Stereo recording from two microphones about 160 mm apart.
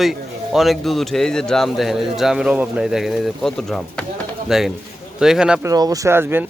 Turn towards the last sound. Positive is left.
turn(degrees=-15)  # may be behind; listen again after turning